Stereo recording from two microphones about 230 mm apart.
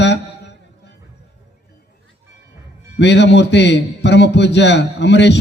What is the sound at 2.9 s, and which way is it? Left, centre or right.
A man's voice, left.